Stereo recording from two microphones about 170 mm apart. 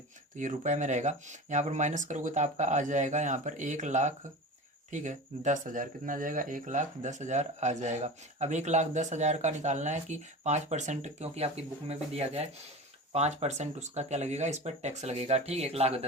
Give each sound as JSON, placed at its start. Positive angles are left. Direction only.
{"t": 0.3, "sound": "speech", "side_deg": -45}